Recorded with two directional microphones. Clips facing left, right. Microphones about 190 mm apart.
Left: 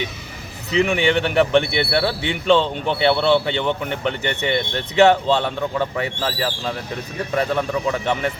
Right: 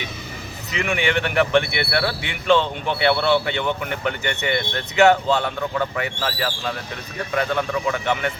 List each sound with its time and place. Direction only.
0.7 s speech: 30° left (ahead or behind)